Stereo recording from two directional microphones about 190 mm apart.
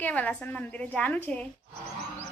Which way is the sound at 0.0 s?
5° left (ahead or behind).